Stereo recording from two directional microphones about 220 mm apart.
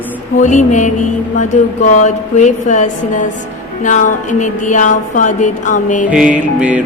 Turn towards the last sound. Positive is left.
turn(degrees=-5)  # may be behind; listen again after turning